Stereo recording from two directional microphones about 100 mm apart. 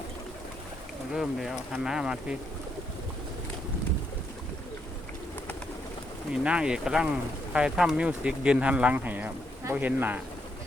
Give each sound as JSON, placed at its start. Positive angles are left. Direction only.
{"t": 1.1, "sound": "speech", "side_deg": 0}
{"t": 6.3, "sound": "speech", "side_deg": -10}